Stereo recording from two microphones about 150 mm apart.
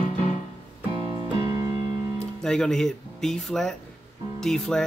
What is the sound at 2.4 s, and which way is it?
Speech, 5° left (ahead or behind).